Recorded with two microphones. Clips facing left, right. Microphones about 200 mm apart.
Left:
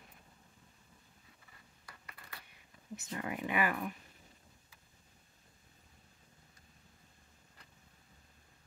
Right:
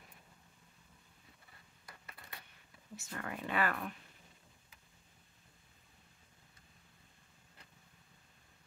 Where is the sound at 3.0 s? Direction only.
20° left (ahead or behind).